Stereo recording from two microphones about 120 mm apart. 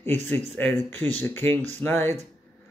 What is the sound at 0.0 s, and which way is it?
Speech, 15° left (ahead or behind).